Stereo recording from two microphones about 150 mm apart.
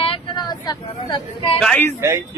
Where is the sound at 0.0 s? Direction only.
35° left (ahead or behind).